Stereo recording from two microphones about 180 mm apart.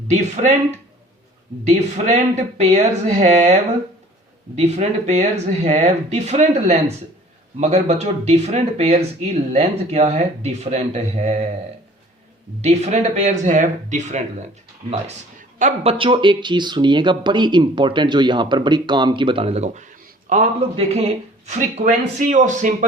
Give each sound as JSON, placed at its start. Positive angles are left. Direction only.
{"t": 1.6, "sound": "speech", "side_deg": -40}
{"t": 4.5, "sound": "speech", "side_deg": -40}
{"t": 12.6, "sound": "speech", "side_deg": -40}